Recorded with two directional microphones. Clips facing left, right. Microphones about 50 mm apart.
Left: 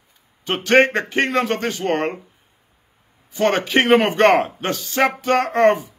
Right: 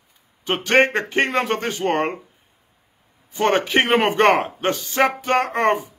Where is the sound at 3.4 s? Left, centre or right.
Centre.